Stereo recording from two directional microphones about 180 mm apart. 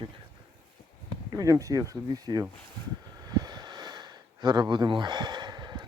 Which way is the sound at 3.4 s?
25° right (ahead or behind).